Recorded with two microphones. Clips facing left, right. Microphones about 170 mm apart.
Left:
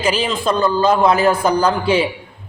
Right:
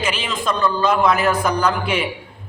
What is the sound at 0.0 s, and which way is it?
A man's voice, 35° left (ahead or behind).